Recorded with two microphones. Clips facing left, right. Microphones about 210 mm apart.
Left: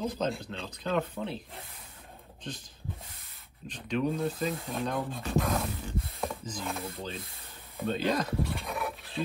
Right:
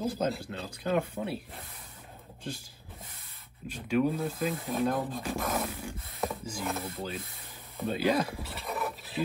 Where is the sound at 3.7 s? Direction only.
10° right (ahead or behind).